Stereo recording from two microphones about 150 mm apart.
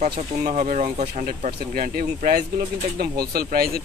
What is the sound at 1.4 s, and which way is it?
Speech, 65° right (ahead or behind).